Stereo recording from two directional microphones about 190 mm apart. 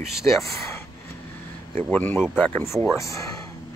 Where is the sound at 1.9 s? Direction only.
10° left (ahead or behind).